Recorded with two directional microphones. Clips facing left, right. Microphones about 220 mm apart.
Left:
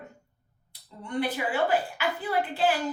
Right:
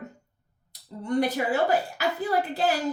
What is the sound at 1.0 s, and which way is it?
A woman's voice, 40° right (ahead or behind).